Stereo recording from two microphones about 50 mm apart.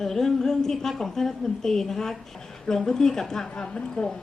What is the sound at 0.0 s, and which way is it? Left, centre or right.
A woman's voice, centre.